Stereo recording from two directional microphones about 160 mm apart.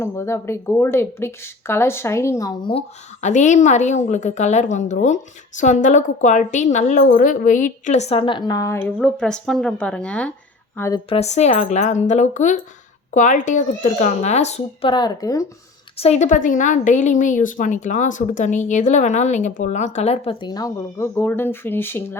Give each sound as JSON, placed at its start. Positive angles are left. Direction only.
{"t": 0.0, "sound": "a woman's voice", "side_deg": 15}
{"t": 2.7, "sound": "a woman's voice", "side_deg": 45}
{"t": 10.8, "sound": "a woman's voice", "side_deg": 20}
{"t": 11.1, "sound": "a woman's voice", "side_deg": 45}
{"t": 16.0, "sound": "a woman's voice", "side_deg": 40}
{"t": 20.5, "sound": "a woman's voice", "side_deg": 20}